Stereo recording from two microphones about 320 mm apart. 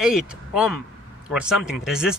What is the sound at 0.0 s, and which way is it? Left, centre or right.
Speech, centre.